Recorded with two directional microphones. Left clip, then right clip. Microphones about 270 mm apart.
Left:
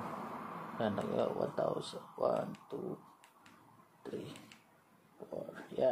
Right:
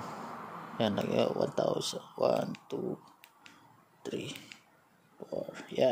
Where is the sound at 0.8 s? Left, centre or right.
Right.